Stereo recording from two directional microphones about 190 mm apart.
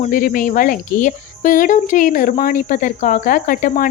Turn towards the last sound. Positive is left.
turn(degrees=45)  # may be behind; listen again after turning